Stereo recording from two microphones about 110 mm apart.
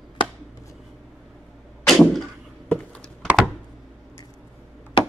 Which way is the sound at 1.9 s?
Centre (ahead or behind).